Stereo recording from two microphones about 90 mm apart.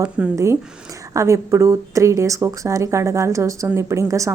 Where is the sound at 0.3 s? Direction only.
30° right (ahead or behind).